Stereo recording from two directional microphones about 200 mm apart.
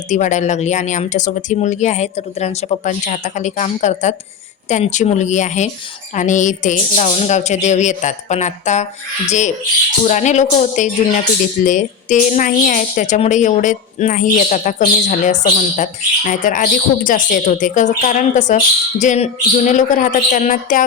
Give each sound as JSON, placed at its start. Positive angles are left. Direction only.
{"t": 0.1, "sound": "a woman's voice", "side_deg": 40}